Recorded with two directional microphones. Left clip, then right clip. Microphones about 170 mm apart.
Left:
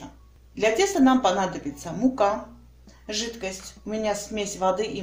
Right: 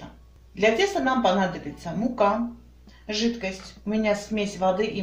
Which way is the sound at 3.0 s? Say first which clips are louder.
Right 3 dB; 35° left (ahead or behind).